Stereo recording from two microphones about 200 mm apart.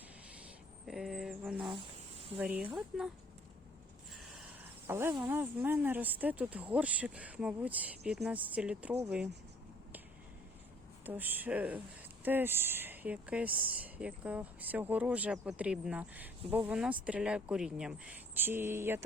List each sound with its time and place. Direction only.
0.9 s a sound: centre (ahead or behind)
1.6 s insect: 25° right (ahead or behind)
2.4 s speech: 10° right (ahead or behind)
4.9 s speech: 15° right (ahead or behind)
11.0 s speech: 10° right (ahead or behind)